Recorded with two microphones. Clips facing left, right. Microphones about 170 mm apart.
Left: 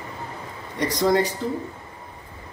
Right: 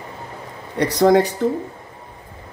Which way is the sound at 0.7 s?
65° right (ahead or behind).